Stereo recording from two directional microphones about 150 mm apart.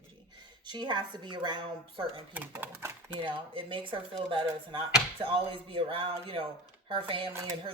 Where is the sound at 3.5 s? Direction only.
35° right (ahead or behind).